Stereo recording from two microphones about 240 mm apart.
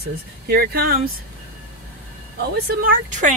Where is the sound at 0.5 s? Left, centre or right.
Right.